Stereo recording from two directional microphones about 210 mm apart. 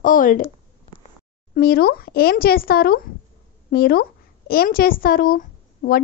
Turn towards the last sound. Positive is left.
turn(degrees=45)  # may be behind; listen again after turning